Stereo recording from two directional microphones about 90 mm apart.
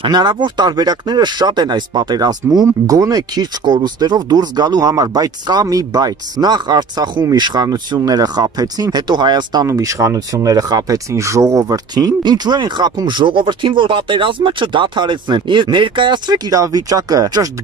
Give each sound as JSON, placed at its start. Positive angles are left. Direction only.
{"t": 0.0, "sound": "speech", "side_deg": -60}
{"t": 9.7, "sound": "speech", "side_deg": -35}
{"t": 12.2, "sound": "speech", "side_deg": -55}